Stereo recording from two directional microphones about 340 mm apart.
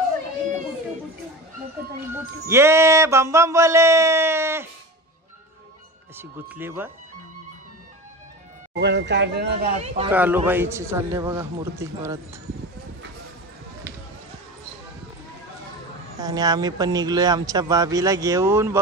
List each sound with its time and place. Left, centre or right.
2.5 s speech: centre
6.1 s speech: centre
8.7 s speech: right
10.1 s speech: centre
16.2 s speech: centre